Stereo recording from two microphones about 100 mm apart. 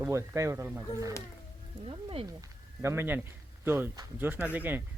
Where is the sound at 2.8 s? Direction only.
25° right (ahead or behind).